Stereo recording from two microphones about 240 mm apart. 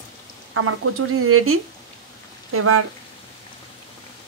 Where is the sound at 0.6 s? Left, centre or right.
Right.